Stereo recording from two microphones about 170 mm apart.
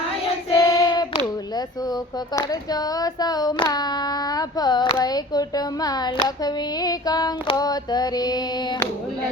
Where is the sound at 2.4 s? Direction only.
20° left (ahead or behind).